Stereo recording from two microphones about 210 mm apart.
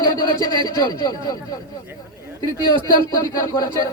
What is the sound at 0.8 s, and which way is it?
Speech, 20° left (ahead or behind).